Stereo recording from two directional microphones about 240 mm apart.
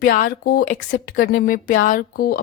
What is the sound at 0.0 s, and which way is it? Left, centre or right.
Speech, left.